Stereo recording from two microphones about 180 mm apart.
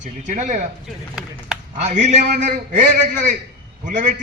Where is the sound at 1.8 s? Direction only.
40° right (ahead or behind).